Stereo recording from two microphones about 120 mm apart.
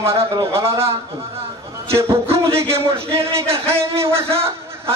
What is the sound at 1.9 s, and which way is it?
Speech, 25° right (ahead or behind).